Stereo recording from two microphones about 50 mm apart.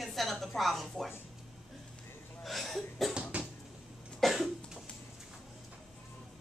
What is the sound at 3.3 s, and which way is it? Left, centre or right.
Dishes, right.